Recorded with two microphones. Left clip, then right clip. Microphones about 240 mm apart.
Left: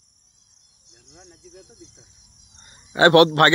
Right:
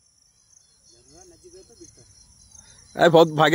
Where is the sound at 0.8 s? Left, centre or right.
Left.